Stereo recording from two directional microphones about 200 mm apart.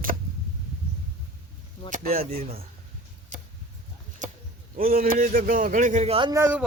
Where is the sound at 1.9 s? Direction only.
45° right (ahead or behind).